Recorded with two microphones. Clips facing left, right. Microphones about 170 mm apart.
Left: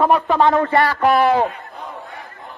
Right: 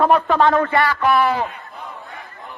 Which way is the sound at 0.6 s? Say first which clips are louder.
Left 2 dB; 35° left (ahead or behind).